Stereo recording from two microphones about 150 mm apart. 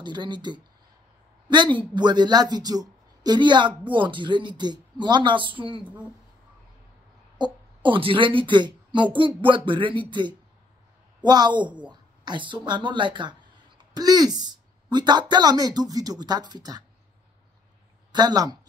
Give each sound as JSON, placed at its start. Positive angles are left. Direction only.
{"t": 0.0, "sound": "a man's voice", "side_deg": -30}
{"t": 7.3, "sound": "a man's voice", "side_deg": -30}
{"t": 18.1, "sound": "speech", "side_deg": -25}